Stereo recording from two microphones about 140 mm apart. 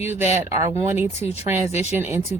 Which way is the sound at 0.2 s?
20° right (ahead or behind).